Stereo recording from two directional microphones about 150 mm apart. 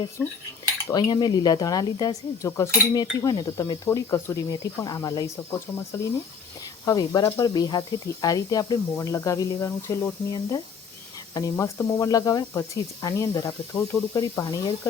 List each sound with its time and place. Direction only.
0.9 s speech: 25° left (ahead or behind)
3.8 s speech: 20° left (ahead or behind)